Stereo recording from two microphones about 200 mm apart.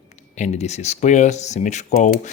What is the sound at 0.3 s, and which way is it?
Speech, 35° left (ahead or behind).